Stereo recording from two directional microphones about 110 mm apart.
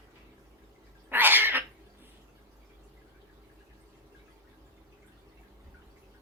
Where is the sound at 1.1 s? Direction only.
20° right (ahead or behind).